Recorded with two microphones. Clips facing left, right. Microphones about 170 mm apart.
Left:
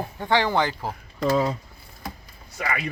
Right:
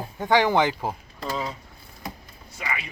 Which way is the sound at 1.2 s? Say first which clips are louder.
Left 8 dB; 65° left (ahead or behind).